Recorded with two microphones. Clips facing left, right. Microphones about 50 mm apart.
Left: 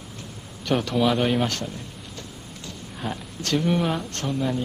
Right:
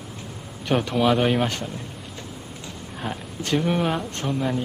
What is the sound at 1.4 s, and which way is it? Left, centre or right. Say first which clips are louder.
Speech: right 1 dB; centre.